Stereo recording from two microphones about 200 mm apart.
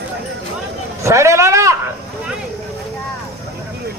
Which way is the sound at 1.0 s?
15° right (ahead or behind).